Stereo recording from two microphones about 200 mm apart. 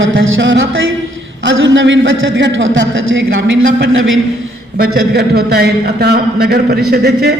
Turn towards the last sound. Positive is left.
turn(degrees=-55)  # may be behind; listen again after turning